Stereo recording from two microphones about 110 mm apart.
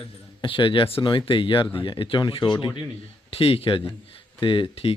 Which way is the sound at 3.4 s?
60° left (ahead or behind).